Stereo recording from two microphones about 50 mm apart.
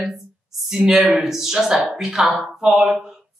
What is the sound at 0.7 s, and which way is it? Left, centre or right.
Speech, centre.